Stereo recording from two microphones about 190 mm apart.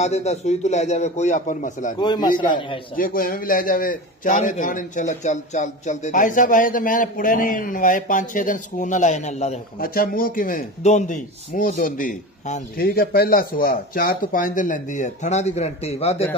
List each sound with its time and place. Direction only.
0.0 s a man's voice: 35° left (ahead or behind)
2.0 s a man's voice: 25° left (ahead or behind)
3.0 s a man's voice: 50° left (ahead or behind)
9.8 s a man's voice: 50° left (ahead or behind); by 16.2 s 35° left (ahead or behind)